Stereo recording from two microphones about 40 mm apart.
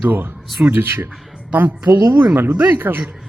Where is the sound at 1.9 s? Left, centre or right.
Right.